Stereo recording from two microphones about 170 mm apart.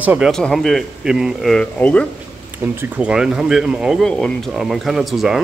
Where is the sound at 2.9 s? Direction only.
5° right (ahead or behind).